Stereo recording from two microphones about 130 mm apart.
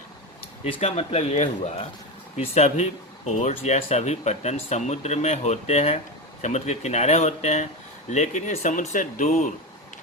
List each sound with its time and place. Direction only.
0.6 s speech: 50° left (ahead or behind); by 9.5 s 75° left (ahead or behind)